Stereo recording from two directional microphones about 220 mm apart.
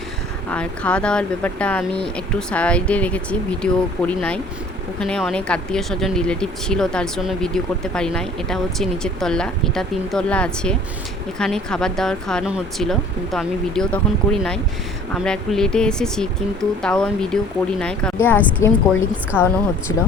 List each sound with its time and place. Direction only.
0.5 s speech: 5° left (ahead or behind)
15.1 s speech: 5° left (ahead or behind)
19.9 s speech: 75° left (ahead or behind)